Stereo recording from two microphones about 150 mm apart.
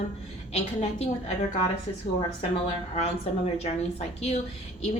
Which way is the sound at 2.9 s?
45° left (ahead or behind).